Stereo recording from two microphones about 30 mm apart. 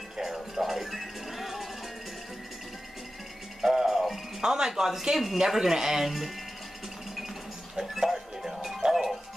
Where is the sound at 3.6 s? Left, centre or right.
Centre.